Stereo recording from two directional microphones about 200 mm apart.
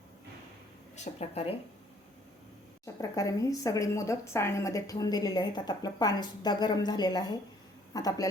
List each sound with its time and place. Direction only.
0.9 s speech: 30° left (ahead or behind)
2.8 s a woman's voice: 15° left (ahead or behind)